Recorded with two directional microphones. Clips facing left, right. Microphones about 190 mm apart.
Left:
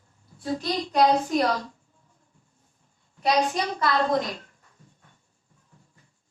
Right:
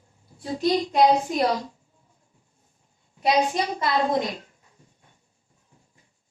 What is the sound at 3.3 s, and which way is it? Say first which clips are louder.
Speech: right 1 dB; 5° right (ahead or behind).